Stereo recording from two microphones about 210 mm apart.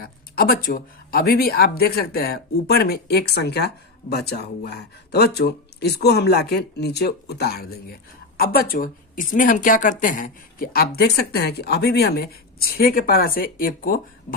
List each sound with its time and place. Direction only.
0.0 s speech: 45° left (ahead or behind)